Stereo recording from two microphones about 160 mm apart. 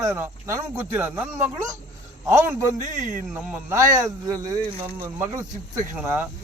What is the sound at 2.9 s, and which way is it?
Speech, 55° right (ahead or behind).